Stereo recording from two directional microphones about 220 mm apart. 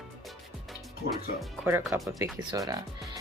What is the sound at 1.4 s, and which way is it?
Speech, 10° right (ahead or behind).